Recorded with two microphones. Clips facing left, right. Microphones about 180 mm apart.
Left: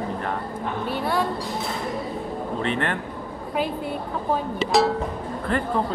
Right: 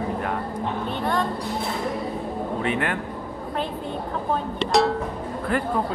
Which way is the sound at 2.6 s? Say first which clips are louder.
Even; 10° right (ahead or behind).